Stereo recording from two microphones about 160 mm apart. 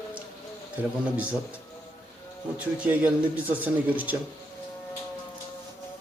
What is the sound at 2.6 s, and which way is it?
A man's voice, 10° right (ahead or behind).